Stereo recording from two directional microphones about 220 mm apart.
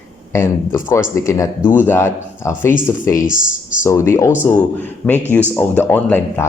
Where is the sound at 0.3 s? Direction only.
10° left (ahead or behind).